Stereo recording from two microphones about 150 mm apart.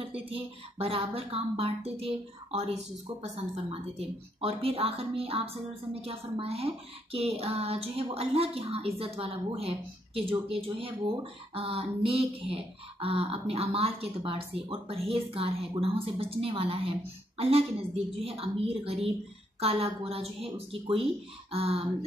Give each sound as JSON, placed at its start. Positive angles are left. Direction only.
{"t": 0.3, "sound": "a woman's voice", "side_deg": -40}